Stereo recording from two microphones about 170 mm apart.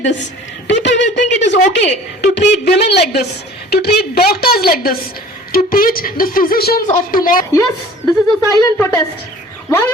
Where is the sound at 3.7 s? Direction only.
70° left (ahead or behind).